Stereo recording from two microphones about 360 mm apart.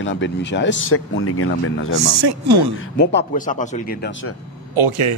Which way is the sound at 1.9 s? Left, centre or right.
Right.